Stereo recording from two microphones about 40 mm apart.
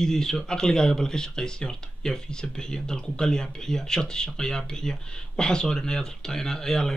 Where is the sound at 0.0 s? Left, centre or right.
Centre.